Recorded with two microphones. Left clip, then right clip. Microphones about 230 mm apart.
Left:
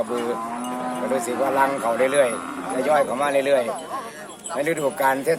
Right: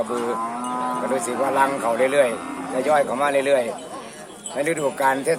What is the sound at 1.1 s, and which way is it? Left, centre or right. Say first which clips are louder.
Speech: left 1 dB; centre.